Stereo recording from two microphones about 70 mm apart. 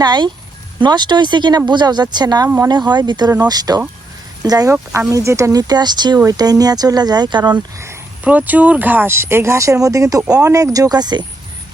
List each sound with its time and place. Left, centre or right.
0.0 s speech: right
3.4 s speech: right
4.9 s speech: right
6.3 s speech: right
8.2 s speech: right